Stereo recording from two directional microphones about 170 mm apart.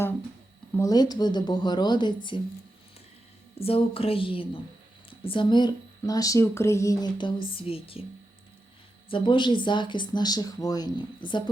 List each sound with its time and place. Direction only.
0.7 s speech: 20° left (ahead or behind)
3.6 s speech: 35° left (ahead or behind)
9.0 s speech: 30° left (ahead or behind)